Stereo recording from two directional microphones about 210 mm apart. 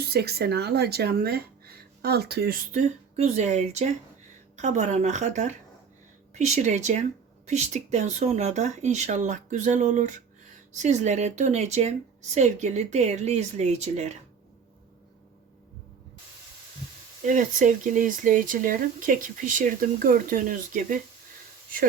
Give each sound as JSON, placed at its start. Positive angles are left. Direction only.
{"t": 0.0, "sound": "speech", "side_deg": -50}
{"t": 17.2, "sound": "speech", "side_deg": -40}